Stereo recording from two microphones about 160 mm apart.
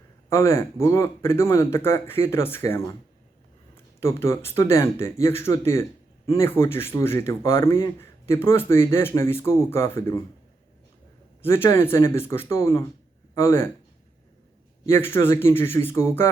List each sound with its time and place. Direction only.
0.3 s speech: 15° left (ahead or behind)
4.0 s speech: 15° left (ahead or behind)
11.4 s speech: 15° left (ahead or behind)
14.8 s speech: 15° left (ahead or behind)